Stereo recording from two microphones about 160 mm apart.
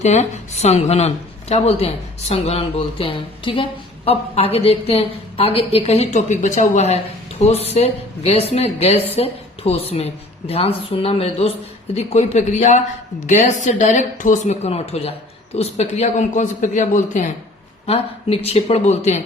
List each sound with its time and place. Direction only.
0.0 s speech: 45° left (ahead or behind)
17.8 s speech: 40° left (ahead or behind)